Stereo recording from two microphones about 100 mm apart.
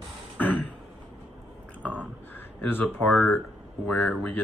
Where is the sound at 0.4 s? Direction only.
15° left (ahead or behind).